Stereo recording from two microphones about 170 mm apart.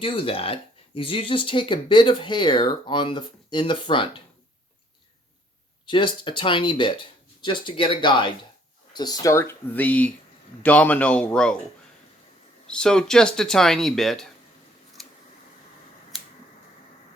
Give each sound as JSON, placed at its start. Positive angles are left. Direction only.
{"t": 0.0, "sound": "speech", "side_deg": 30}
{"t": 5.8, "sound": "speech", "side_deg": 30}
{"t": 12.7, "sound": "speech", "side_deg": 5}